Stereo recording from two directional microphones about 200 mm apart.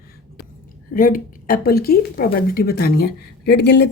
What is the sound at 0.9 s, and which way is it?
A woman's voice, 45° left (ahead or behind).